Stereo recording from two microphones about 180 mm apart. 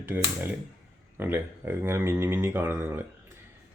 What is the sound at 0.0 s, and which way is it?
Speech, 10° right (ahead or behind).